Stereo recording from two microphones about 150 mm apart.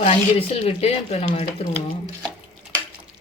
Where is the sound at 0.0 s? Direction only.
40° left (ahead or behind).